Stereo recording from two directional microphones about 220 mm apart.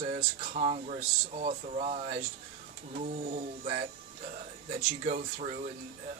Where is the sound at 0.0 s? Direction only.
35° right (ahead or behind).